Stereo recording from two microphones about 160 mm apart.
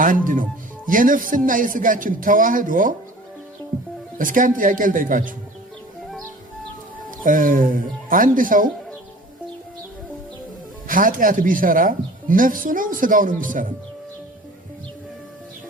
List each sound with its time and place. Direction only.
0.9 s a woman's voice: 55° right (ahead or behind)
4.2 s a woman's voice: 55° right (ahead or behind)
7.2 s a woman's voice: 55° right (ahead or behind)
10.8 s a woman's voice: 60° right (ahead or behind)